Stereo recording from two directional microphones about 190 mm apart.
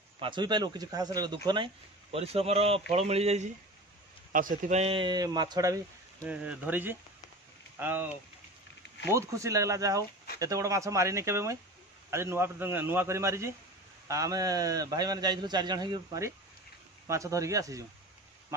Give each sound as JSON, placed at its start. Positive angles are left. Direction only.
{"t": 0.2, "sound": "a man's voice", "side_deg": -25}
{"t": 4.3, "sound": "a man's voice", "side_deg": -45}
{"t": 6.2, "sound": "a man's voice", "side_deg": -5}